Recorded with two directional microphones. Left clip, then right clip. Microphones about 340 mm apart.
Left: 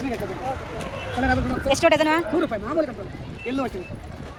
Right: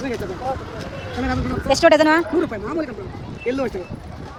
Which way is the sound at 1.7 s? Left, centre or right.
Right.